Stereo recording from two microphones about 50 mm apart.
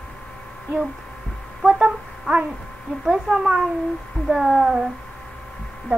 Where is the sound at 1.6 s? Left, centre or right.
Centre.